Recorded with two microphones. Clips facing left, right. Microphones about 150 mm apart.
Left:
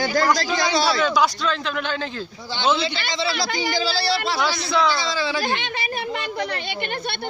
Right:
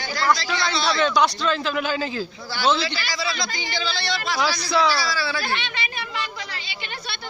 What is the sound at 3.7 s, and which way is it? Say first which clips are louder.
Speech: left 5 dB; 35° left (ahead or behind).